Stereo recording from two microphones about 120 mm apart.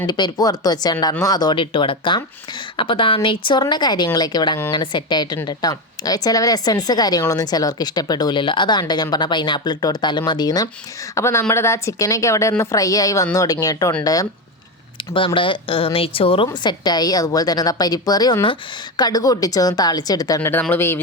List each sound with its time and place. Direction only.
0.0 s speech: 35° left (ahead or behind)
11.1 s a woman's voice: 25° left (ahead or behind)
15.4 s speech: 45° left (ahead or behind)
16.6 s speech: 35° left (ahead or behind)
20.5 s speech: 15° left (ahead or behind)